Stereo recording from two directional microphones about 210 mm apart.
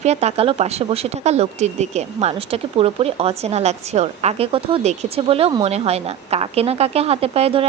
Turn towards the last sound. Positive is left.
turn(degrees=-25)  # may be behind; listen again after turning